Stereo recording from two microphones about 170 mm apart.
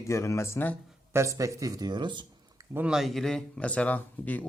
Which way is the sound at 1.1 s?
20° right (ahead or behind).